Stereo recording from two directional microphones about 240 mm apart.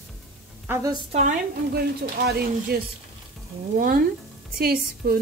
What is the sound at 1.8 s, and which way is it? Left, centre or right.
Speech, right.